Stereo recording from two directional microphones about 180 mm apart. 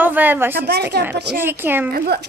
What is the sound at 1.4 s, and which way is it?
Speech, 10° right (ahead or behind).